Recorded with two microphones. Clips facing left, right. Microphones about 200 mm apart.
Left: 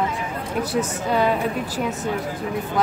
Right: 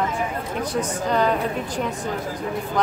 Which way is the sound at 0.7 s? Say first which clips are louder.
Even; 5° left (ahead or behind).